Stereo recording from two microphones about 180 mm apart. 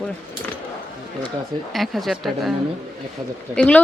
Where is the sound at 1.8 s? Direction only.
Centre (ahead or behind).